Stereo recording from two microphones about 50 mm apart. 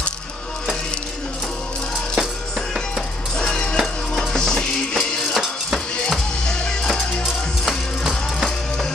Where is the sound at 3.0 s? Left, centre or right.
Centre.